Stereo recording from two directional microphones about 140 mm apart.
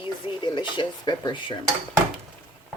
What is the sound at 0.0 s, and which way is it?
Speech, 35° left (ahead or behind).